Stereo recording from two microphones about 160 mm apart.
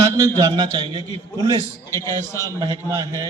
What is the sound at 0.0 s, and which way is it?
A man's voice, 20° right (ahead or behind).